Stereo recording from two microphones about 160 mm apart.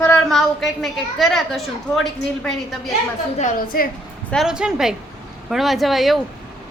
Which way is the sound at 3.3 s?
55° left (ahead or behind).